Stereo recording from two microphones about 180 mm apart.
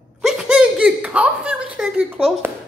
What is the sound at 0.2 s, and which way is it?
A man's voice, 5° right (ahead or behind).